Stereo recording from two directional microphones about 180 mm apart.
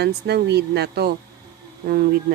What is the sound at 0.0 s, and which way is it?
A woman's voice, 65° right (ahead or behind).